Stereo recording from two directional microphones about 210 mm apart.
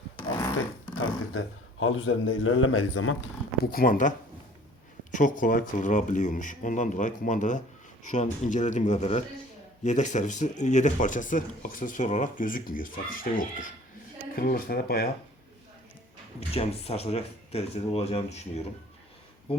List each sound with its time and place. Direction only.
0.9 s a man's voice: 70° left (ahead or behind)
3.6 s speech: 45° left (ahead or behind)
5.1 s speech: 40° left (ahead or behind)
16.6 s speech: 30° left (ahead or behind)